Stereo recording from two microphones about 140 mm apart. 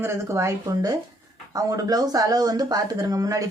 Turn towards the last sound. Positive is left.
turn(degrees=-25)  # may be behind; listen again after turning